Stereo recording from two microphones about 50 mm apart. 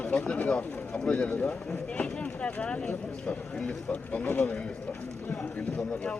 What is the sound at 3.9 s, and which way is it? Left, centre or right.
Speech, left.